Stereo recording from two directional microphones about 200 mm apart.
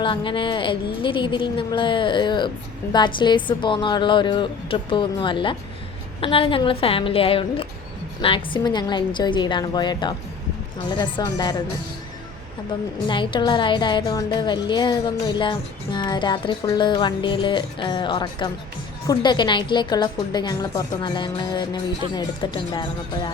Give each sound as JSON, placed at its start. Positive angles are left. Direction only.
{"t": 0.0, "sound": "a woman's voice", "side_deg": 25}
{"t": 13.1, "sound": "a woman's voice", "side_deg": 25}